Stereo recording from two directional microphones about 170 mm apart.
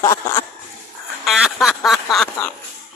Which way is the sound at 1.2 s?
Centre (ahead or behind).